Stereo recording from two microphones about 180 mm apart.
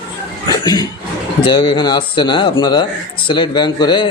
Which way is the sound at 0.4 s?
20° left (ahead or behind).